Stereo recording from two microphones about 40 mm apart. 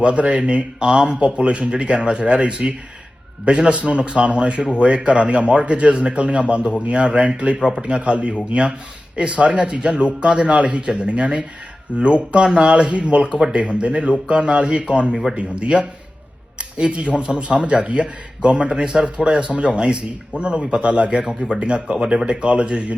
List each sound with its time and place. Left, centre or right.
0.0 s a man's voice: right